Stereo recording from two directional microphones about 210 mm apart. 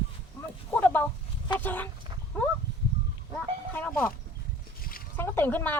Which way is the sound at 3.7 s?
5° left (ahead or behind).